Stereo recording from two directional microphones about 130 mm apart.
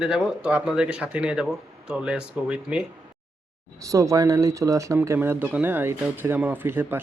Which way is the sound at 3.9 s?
25° right (ahead or behind).